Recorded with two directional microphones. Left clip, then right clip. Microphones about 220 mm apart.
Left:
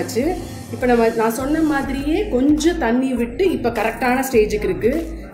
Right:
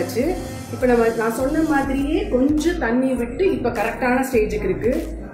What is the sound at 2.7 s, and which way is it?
Speech, 40° left (ahead or behind).